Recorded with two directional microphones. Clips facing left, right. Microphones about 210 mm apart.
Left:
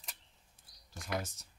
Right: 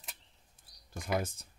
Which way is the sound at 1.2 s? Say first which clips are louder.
Right 4 dB; 55° right (ahead or behind).